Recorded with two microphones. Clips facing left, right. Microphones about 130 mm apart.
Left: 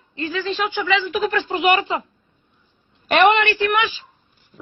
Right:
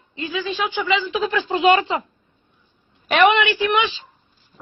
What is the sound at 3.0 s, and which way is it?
Speech, 5° right (ahead or behind).